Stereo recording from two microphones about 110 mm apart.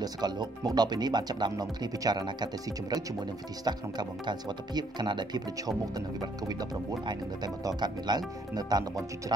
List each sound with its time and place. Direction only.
0.0 s speech: 40° right (ahead or behind)